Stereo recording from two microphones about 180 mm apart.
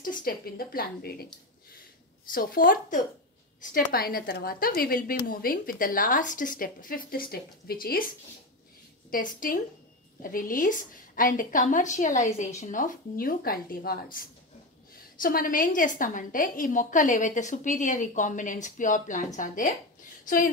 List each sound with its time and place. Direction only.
0.0 s a woman's voice: 50° left (ahead or behind)
2.3 s a woman's voice: 50° left (ahead or behind)
9.1 s a woman's voice: 50° left (ahead or behind)